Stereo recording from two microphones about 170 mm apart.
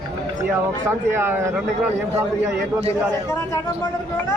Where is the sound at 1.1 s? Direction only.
15° right (ahead or behind).